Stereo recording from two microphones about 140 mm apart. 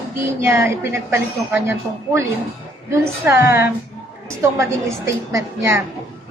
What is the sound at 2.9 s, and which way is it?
A woman's voice, 20° right (ahead or behind).